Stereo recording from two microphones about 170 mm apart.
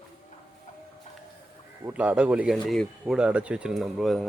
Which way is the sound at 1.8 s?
10° right (ahead or behind).